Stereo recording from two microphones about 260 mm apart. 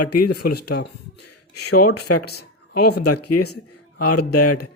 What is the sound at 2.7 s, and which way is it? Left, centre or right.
Speech, left.